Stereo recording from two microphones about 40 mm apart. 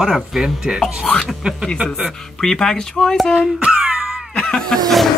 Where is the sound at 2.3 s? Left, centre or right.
Centre.